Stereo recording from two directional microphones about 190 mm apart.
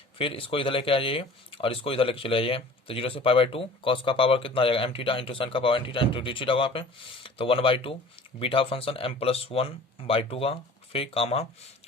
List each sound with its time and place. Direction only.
0.2 s speech: 30° left (ahead or behind)